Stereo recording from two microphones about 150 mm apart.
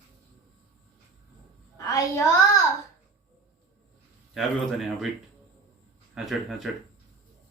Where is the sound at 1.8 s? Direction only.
20° left (ahead or behind).